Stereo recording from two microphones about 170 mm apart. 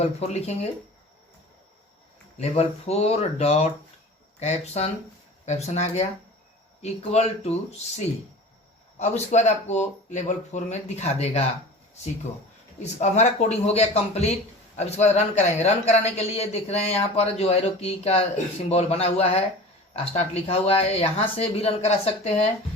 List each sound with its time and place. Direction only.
0.0 s speech: 40° left (ahead or behind)
2.4 s speech: 40° left (ahead or behind)
12.8 s speech: 40° left (ahead or behind)